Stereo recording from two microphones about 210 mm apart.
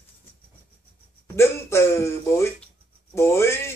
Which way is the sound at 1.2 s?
10° left (ahead or behind).